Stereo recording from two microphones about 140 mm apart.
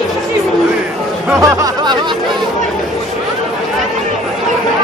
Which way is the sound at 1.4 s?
25° right (ahead or behind).